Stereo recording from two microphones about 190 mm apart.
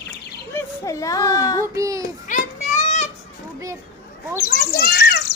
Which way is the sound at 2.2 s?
40° left (ahead or behind).